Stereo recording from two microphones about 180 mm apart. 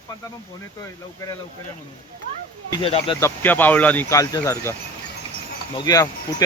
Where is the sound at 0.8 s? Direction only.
20° left (ahead or behind).